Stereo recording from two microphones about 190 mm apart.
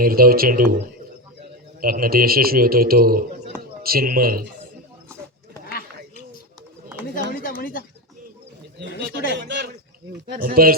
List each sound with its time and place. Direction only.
0.0 s speech: 50° right (ahead or behind)
1.8 s a man's voice: 50° right (ahead or behind)
7.4 s speech: 50° left (ahead or behind)
9.0 s a man's voice: 65° right (ahead or behind)
10.3 s speech: 50° right (ahead or behind)